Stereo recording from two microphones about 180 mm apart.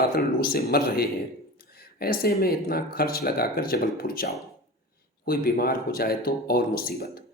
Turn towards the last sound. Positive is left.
turn(degrees=60)  # may be behind; listen again after turning